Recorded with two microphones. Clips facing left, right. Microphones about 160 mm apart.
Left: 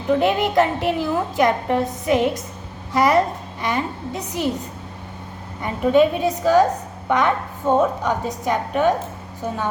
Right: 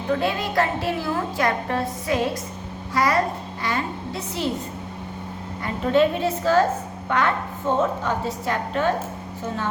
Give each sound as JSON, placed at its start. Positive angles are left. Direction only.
{"t": 0.2, "sound": "a woman's voice", "side_deg": 20}
{"t": 5.6, "sound": "a woman's voice", "side_deg": 15}